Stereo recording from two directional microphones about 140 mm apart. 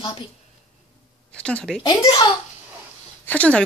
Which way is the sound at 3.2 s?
10° left (ahead or behind).